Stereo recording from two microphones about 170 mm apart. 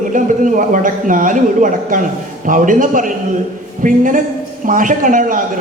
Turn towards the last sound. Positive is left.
turn(degrees=-50)  # may be behind; listen again after turning